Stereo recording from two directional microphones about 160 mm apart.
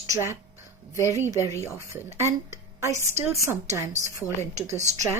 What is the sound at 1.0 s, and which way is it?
Speech, 15° right (ahead or behind).